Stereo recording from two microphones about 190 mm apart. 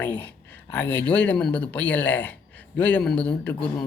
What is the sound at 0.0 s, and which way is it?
Speech, 10° left (ahead or behind).